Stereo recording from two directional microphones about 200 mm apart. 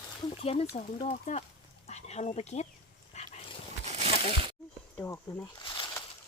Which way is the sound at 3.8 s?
35° right (ahead or behind).